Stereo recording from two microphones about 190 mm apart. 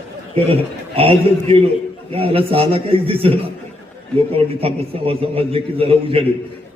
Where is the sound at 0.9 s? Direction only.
30° right (ahead or behind).